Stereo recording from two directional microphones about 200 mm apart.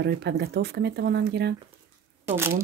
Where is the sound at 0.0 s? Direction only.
55° right (ahead or behind).